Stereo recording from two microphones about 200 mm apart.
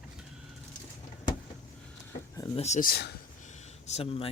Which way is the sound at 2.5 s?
35° left (ahead or behind).